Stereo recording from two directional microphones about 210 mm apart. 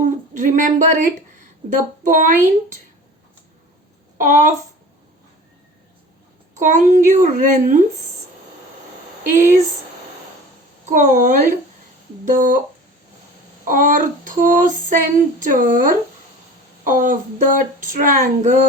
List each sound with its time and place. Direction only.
0.0 s a sound: 35° right (ahead or behind)
2.1 s female singing: 40° right (ahead or behind)
4.2 s female singing: 40° right (ahead or behind)
6.5 s female singing: 35° right (ahead or behind)
9.3 s female singing: 40° right (ahead or behind)
10.8 s female singing: 35° right (ahead or behind)
13.7 s female singing: 40° right (ahead or behind)